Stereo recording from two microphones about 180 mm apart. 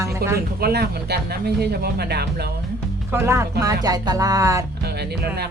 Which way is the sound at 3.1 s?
15° right (ahead or behind).